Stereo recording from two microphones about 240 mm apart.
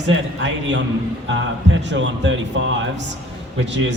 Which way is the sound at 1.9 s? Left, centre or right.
Right.